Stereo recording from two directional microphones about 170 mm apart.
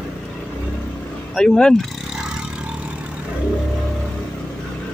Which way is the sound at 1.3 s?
5° left (ahead or behind).